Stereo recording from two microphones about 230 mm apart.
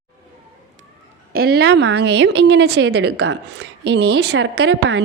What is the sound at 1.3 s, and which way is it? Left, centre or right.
A woman's voice, right.